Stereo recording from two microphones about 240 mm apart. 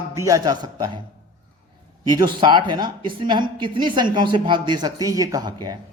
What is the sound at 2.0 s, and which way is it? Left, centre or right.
A man's voice, centre.